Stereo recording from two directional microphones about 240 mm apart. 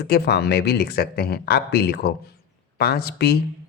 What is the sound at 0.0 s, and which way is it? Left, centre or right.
Speech, left.